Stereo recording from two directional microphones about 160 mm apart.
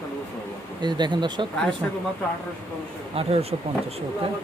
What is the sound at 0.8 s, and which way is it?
Speech, 30° right (ahead or behind).